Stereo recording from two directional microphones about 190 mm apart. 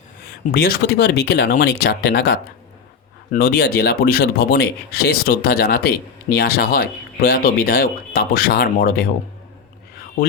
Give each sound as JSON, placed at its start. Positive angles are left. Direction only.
{"t": 0.5, "sound": "speech", "side_deg": 55}
{"t": 10.2, "sound": "speech", "side_deg": 50}